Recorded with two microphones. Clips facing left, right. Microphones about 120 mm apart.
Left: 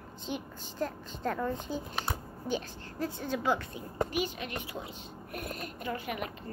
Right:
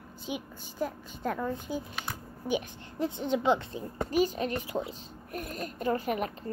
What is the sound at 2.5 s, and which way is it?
A woman's voice, 20° right (ahead or behind).